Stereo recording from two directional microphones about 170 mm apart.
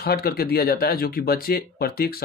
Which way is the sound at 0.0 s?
65° left (ahead or behind).